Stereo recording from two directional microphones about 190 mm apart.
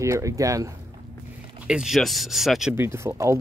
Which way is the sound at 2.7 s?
15° right (ahead or behind).